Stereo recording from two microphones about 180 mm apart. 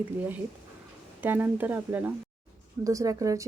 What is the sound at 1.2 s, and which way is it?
Speech, 10° right (ahead or behind).